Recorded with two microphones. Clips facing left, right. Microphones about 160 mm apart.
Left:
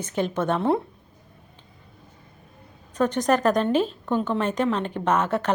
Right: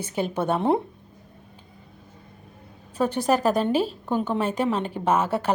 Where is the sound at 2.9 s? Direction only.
10° right (ahead or behind).